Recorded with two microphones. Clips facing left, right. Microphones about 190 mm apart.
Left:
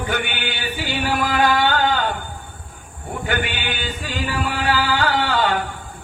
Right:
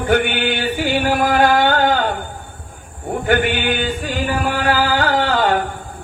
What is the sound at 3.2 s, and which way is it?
Chant, 50° right (ahead or behind).